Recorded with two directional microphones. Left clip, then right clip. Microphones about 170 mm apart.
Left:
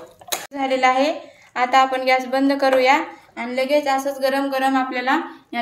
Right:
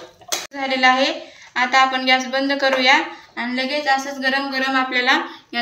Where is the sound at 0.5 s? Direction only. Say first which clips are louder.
Right 1 dB; 60° left (ahead or behind).